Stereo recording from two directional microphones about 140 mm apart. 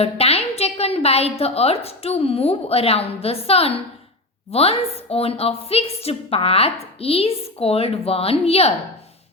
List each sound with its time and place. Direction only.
0.0 s a woman's voice: 45° left (ahead or behind)